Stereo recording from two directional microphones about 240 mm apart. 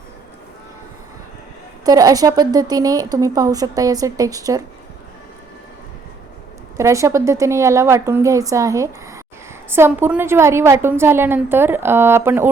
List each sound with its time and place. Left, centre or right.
1.8 s speech: centre
6.7 s speech: centre